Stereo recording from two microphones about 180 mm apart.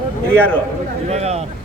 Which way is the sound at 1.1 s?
35° right (ahead or behind).